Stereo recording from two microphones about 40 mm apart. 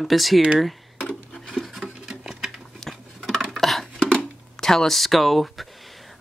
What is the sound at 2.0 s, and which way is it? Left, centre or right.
Patter, centre.